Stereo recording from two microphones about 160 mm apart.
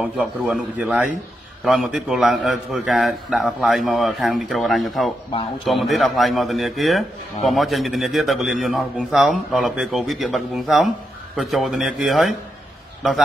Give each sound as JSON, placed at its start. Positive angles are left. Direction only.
{"t": 0.0, "sound": "a man's voice", "side_deg": -5}